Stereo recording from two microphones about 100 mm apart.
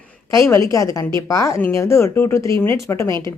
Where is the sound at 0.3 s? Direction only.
30° left (ahead or behind).